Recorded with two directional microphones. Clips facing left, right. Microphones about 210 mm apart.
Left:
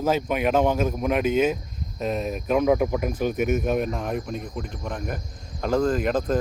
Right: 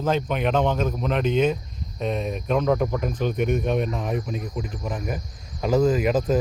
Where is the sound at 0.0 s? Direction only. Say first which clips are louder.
Left 1 dB; 10° left (ahead or behind).